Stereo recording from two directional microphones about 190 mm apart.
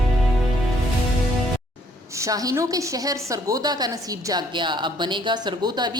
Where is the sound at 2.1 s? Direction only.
15° right (ahead or behind).